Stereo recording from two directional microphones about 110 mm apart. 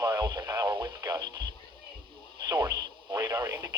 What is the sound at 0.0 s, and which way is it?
Radio, 40° right (ahead or behind).